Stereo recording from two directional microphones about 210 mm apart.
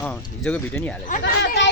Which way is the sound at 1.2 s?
60° left (ahead or behind).